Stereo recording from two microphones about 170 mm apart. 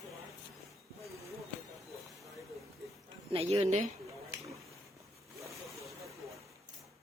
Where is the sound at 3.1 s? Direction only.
35° right (ahead or behind).